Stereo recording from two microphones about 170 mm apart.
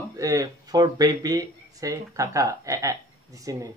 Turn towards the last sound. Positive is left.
turn(degrees=-20)  # may be behind; listen again after turning